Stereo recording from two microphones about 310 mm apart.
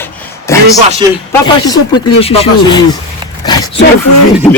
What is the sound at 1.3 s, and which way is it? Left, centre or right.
A man's voice, centre.